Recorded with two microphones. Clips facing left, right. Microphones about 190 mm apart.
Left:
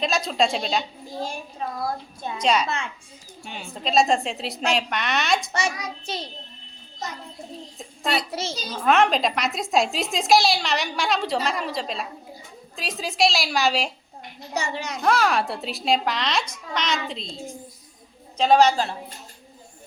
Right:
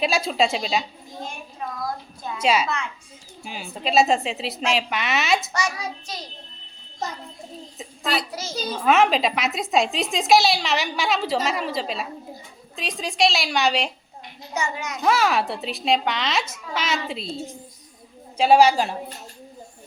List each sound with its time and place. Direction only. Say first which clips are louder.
0.0 s a woman's voice: right 1 dB; 10° right (ahead or behind)
1.0 s a child's voice: left 4 dB; 30° left (ahead or behind)
2.4 s a woman's voice: right 1 dB; 5° right (ahead or behind)
5.5 s a child's voice: even; 30° left (ahead or behind)
7.8 s a sound: even; centre (ahead or behind)
8.3 s a child's voice: left 3 dB; 30° left (ahead or behind)
8.7 s a woman's voice: right 1 dB; centre (ahead or behind)
14.5 s a child's voice: even; 35° left (ahead or behind)
15.0 s a woman's voice: right 1 dB; centre (ahead or behind)
18.3 s a woman's voice: right 2 dB; 10° right (ahead or behind)